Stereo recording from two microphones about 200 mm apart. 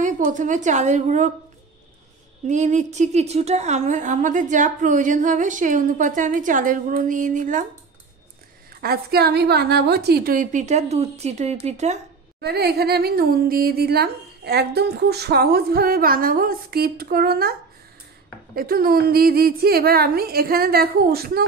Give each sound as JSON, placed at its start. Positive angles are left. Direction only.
{"t": 0.0, "sound": "a woman's voice", "side_deg": -40}
{"t": 2.4, "sound": "a woman's voice", "side_deg": -35}
{"t": 8.8, "sound": "a woman's voice", "side_deg": -50}
{"t": 12.4, "sound": "speech", "side_deg": -55}